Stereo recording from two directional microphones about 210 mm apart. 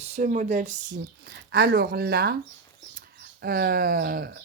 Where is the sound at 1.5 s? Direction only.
50° right (ahead or behind).